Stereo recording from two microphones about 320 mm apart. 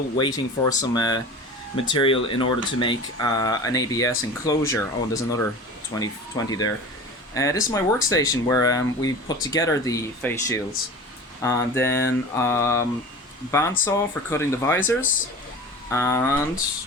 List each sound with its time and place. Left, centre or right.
0.2 s speech: centre
15.9 s speech: centre